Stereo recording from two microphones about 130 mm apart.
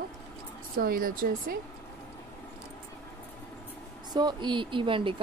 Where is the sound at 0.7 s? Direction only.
90° right.